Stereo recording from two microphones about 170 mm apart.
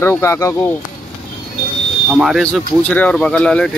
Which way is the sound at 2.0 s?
Centre (ahead or behind).